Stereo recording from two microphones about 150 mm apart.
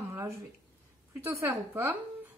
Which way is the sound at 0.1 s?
20° right (ahead or behind).